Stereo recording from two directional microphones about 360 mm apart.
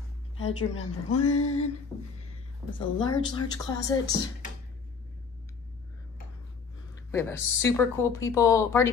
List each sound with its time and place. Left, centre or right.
0.5 s speech: centre
1.0 s a sound: left
2.8 s speech: centre
7.1 s speech: centre